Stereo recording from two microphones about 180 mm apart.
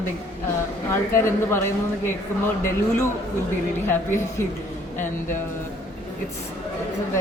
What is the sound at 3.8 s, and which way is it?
Speech, 15° left (ahead or behind).